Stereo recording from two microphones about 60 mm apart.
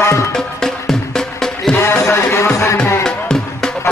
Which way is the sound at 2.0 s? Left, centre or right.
Left.